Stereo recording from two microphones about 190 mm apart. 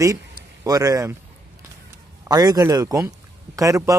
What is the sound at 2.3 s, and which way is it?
A man's voice, 20° right (ahead or behind).